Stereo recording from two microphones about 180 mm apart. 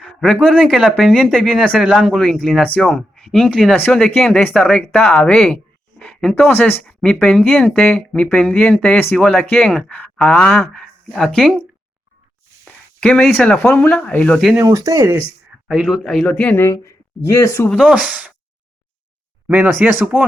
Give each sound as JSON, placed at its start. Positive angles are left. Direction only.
{"t": 0.0, "sound": "speech", "side_deg": 0}
{"t": 12.6, "sound": "speech", "side_deg": 5}
{"t": 14.6, "sound": "speech", "side_deg": -20}
{"t": 15.6, "sound": "speech", "side_deg": -5}
{"t": 17.7, "sound": "speech", "side_deg": -5}
{"t": 19.5, "sound": "speech", "side_deg": -10}